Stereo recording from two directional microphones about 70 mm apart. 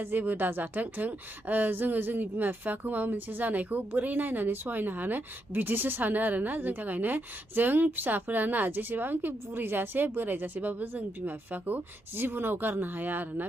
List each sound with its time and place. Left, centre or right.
0.0 s a woman's voice: right